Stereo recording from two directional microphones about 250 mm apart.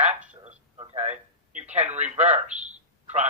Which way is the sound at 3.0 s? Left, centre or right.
Right.